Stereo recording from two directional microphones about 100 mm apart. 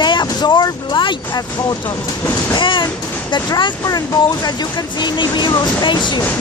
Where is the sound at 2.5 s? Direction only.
55° left (ahead or behind).